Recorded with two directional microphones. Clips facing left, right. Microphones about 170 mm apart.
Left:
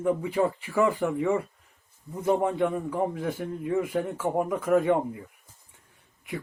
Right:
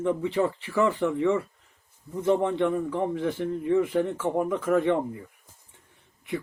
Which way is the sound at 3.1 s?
5° left (ahead or behind).